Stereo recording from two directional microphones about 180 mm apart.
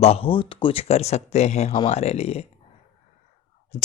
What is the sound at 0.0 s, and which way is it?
Speech, 35° left (ahead or behind).